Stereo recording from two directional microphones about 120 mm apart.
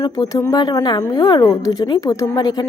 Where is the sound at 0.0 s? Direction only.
30° left (ahead or behind).